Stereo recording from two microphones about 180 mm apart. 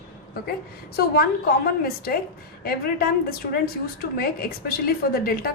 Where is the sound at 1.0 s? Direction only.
60° left (ahead or behind).